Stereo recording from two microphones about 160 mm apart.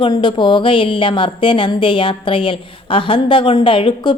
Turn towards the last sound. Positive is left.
turn(degrees=30)  # may be behind; listen again after turning